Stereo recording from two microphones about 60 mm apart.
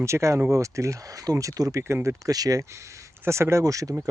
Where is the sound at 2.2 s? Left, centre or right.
Right.